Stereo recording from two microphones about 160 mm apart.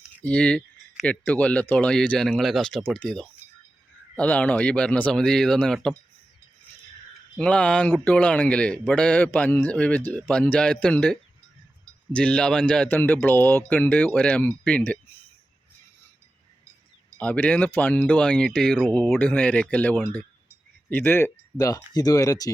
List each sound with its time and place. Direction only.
0.2 s a man's voice: 5° left (ahead or behind)
7.3 s a man's voice: 5° left (ahead or behind)
17.2 s a man's voice: 10° left (ahead or behind)